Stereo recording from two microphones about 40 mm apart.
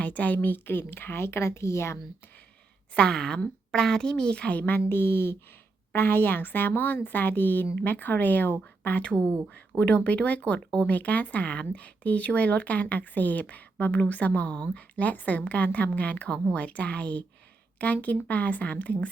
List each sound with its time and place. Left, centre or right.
0.0 s a woman's voice: left
2.9 s a child's voice: left
4.5 s a woman's voice: left
5.9 s a woman's voice: left
9.6 s speech: left